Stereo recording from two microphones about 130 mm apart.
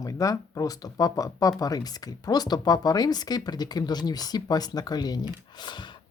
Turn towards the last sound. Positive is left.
turn(degrees=30)  # may be behind; listen again after turning